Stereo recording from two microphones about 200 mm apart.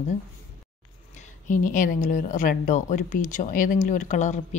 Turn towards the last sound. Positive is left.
turn(degrees=35)  # may be behind; listen again after turning